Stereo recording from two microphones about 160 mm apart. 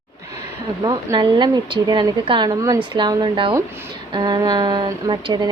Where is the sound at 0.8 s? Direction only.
25° right (ahead or behind).